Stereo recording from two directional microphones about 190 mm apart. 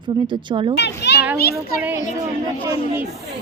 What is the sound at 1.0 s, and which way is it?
Children playing, 65° left (ahead or behind).